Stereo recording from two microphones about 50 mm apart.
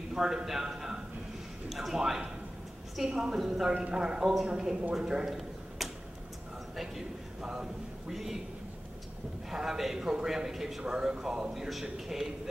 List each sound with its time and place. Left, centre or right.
0.1 s a man's voice: centre
9.5 s a man's voice: centre